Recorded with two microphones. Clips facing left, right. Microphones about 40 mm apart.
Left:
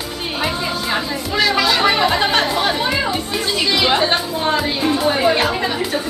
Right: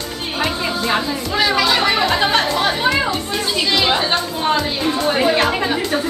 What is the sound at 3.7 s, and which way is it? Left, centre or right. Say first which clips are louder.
A woman's voice: left 1 dB; centre.